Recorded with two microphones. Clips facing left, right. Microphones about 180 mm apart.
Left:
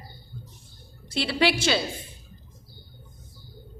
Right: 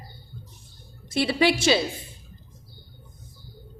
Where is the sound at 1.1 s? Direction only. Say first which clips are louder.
Right 2 dB; 20° right (ahead or behind).